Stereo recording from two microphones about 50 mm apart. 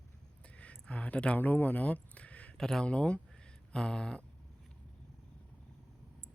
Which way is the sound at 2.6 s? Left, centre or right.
Centre.